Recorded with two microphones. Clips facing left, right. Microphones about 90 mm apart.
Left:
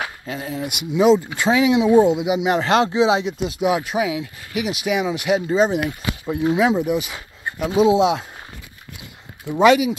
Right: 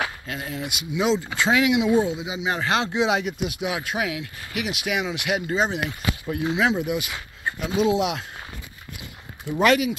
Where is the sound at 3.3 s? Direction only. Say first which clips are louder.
Left 7 dB; 35° left (ahead or behind).